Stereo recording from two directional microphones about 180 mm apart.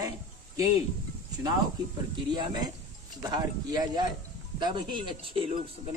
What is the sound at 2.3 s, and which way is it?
A man's voice, 25° right (ahead or behind).